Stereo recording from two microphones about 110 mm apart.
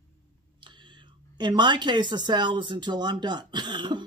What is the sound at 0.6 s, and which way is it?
Speech, 45° right (ahead or behind).